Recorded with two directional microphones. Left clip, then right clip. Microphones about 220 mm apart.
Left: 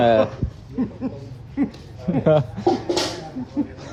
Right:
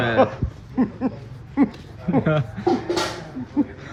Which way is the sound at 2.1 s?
15° left (ahead or behind).